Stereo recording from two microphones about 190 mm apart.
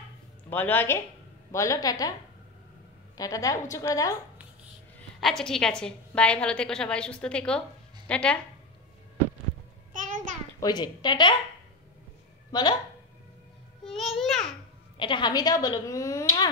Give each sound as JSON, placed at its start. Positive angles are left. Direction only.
{"t": 0.5, "sound": "a woman's voice", "side_deg": 10}
{"t": 3.2, "sound": "a woman's voice", "side_deg": 20}
{"t": 5.2, "sound": "a woman's voice", "side_deg": 0}
{"t": 9.9, "sound": "a sound", "side_deg": -40}
{"t": 10.6, "sound": "speech", "side_deg": 20}
{"t": 12.4, "sound": "a sound", "side_deg": 20}
{"t": 13.9, "sound": "babbling", "side_deg": 0}
{"t": 15.0, "sound": "speech", "side_deg": 25}